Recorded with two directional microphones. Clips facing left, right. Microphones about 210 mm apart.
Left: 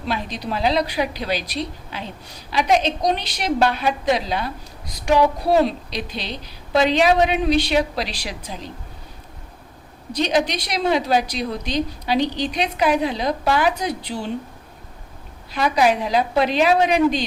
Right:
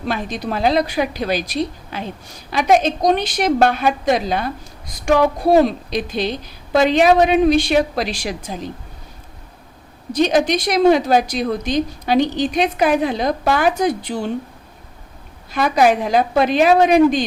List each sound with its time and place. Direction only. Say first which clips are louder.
0.1 s a woman's voice: right 2 dB; 50° right (ahead or behind)
10.1 s a woman's voice: right 5 dB; 50° right (ahead or behind)
15.5 s a woman's voice: right 3 dB; 50° right (ahead or behind)